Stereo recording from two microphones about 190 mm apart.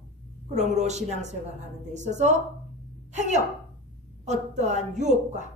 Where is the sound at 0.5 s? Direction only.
35° right (ahead or behind).